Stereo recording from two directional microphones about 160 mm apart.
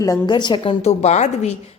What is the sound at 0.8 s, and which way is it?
Speech, 45° left (ahead or behind).